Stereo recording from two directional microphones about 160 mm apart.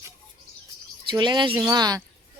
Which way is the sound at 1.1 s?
30° right (ahead or behind).